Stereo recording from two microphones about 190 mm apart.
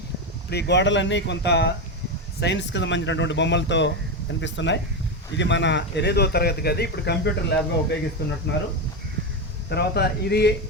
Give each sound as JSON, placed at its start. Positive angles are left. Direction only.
{"t": 0.5, "sound": "speech", "side_deg": 65}
{"t": 9.6, "sound": "speech", "side_deg": 60}